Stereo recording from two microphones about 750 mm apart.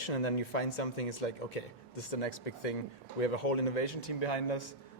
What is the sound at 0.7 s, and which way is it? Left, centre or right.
Speech, left.